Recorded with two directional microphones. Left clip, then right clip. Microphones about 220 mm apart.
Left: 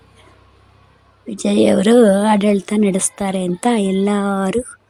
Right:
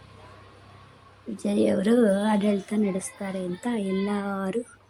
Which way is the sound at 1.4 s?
45° left (ahead or behind).